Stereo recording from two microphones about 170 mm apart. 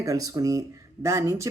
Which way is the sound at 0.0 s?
20° right (ahead or behind).